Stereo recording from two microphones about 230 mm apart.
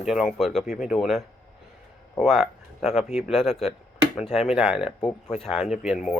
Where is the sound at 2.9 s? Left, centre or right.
Left.